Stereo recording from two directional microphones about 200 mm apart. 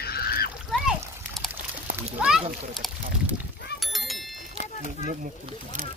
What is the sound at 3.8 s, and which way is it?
Bicycle bell, centre (ahead or behind).